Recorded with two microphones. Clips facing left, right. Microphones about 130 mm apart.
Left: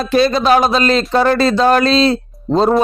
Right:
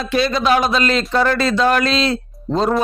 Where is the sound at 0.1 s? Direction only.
35° left (ahead or behind).